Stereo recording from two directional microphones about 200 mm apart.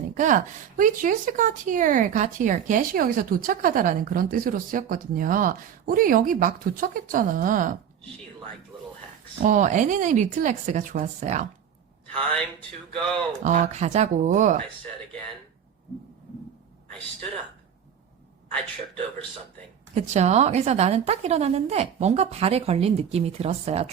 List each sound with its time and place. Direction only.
0.1 s speech: 40° right (ahead or behind)
9.4 s a woman's voice: 40° right (ahead or behind)
12.5 s music: 5° left (ahead or behind)
13.4 s a woman's voice: 40° right (ahead or behind)
19.9 s a woman's voice: 35° right (ahead or behind)